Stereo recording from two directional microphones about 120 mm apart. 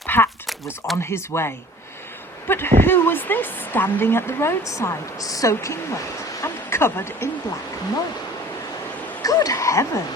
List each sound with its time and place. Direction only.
0.1 s speech: 15° left (ahead or behind)
0.4 s a sound: centre (ahead or behind)
1.0 s a woman's voice: 20° left (ahead or behind)
9.2 s speech: 30° left (ahead or behind)